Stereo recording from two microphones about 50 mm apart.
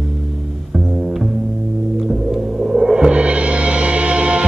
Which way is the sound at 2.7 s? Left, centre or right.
Centre.